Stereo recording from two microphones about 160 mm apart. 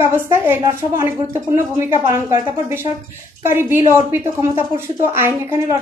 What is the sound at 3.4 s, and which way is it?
A woman's voice, 15° right (ahead or behind).